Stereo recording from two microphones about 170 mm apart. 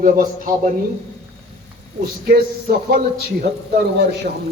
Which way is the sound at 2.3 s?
65° right (ahead or behind).